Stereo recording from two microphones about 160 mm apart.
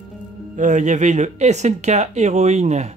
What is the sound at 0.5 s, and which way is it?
Speech, 50° right (ahead or behind).